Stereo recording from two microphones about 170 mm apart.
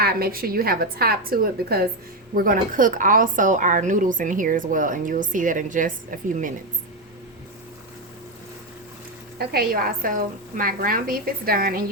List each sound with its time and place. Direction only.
0.0 s a woman's voice: 65° right (ahead or behind)
9.4 s a woman's voice: 65° right (ahead or behind)